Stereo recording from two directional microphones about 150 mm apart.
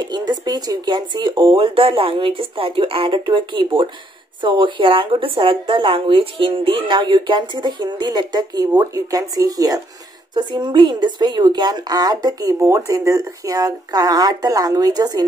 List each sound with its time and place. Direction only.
0.1 s a woman's voice: 30° right (ahead or behind)